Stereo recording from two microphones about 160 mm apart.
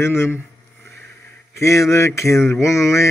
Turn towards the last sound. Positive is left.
turn(degrees=20)  # may be behind; listen again after turning